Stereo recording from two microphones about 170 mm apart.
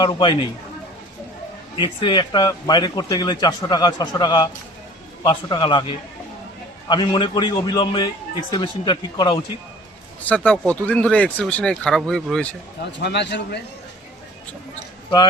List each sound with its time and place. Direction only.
0.0 s speech: 25° left (ahead or behind)
1.7 s speech: 30° left (ahead or behind)
10.2 s speech: 5° left (ahead or behind)
13.0 s a man's voice: 90° left